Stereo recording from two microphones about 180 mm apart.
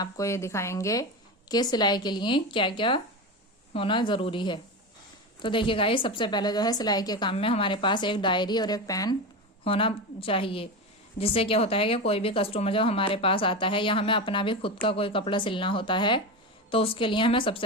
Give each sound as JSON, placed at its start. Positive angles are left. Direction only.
{"t": 0.0, "sound": "a woman's voice", "side_deg": 15}